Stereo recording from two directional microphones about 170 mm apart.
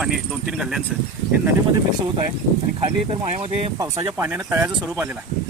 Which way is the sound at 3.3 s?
40° right (ahead or behind).